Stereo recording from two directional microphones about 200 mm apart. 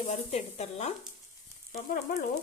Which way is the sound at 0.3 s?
35° left (ahead or behind).